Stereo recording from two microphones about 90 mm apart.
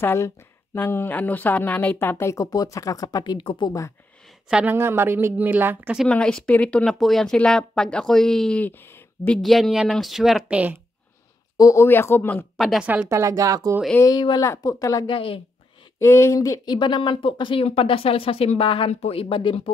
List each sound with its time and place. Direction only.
0.0 s speech: 30° left (ahead or behind); by 3.3 s 45° left (ahead or behind)
3.3 s speech: 65° left (ahead or behind)
4.6 s speech: 25° right (ahead or behind)
6.0 s a woman's voice: 10° left (ahead or behind)
10.5 s speech: 15° right (ahead or behind)
11.5 s speech: 35° left (ahead or behind)
12.5 s speech: centre (ahead or behind)
12.8 s speech: 15° right (ahead or behind)
13.1 s speech: 30° right (ahead or behind)
14.0 s speech: 25° left (ahead or behind)
14.4 s speech: 40° left (ahead or behind)
15.0 s speech: 85° left
16.0 s speech: 30° left (ahead or behind)
16.6 s speech: 55° left (ahead or behind); by 19.7 s 80° left